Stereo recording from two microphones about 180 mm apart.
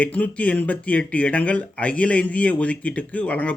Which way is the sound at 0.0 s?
10° left (ahead or behind).